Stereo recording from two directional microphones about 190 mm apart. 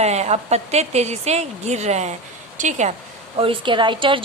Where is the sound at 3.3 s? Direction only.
30° right (ahead or behind).